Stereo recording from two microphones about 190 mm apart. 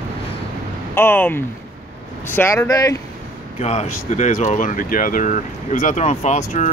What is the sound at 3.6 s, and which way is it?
Speech, 35° left (ahead or behind).